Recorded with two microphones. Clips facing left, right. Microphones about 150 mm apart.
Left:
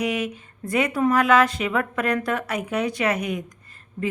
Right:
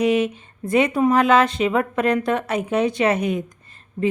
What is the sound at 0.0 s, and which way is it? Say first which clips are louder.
Speech: right 7 dB; 25° right (ahead or behind).